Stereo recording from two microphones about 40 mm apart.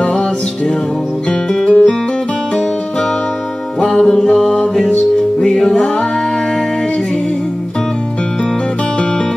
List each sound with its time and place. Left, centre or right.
1.7 s music: left
3.8 s music: centre
4.1 s music: left